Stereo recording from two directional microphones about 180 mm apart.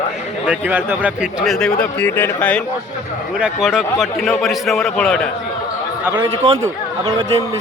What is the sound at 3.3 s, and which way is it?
Speech, 5° right (ahead or behind).